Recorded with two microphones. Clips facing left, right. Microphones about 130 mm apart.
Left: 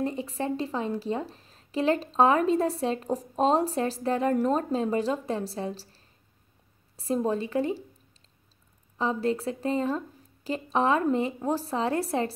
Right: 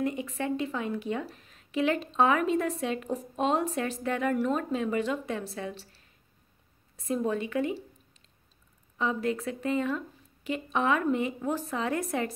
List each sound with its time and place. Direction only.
0.0 s speech: 35° left (ahead or behind)
7.0 s speech: 30° left (ahead or behind)
8.9 s speech: 30° left (ahead or behind)